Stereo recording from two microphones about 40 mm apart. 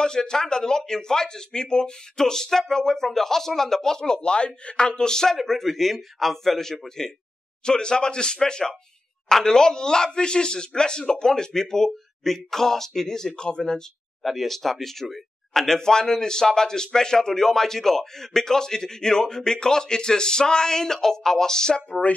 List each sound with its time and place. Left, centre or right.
0.0 s speech: centre
14.2 s speech: centre